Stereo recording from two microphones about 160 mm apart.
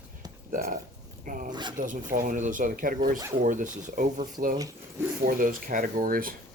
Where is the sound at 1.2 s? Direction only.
55° right (ahead or behind).